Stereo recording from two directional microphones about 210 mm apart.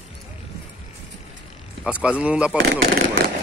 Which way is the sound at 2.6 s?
50° right (ahead or behind).